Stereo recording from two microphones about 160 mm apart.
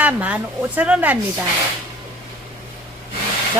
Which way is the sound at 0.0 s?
10° right (ahead or behind).